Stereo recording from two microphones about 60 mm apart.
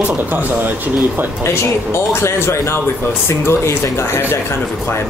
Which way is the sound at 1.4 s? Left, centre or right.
Left.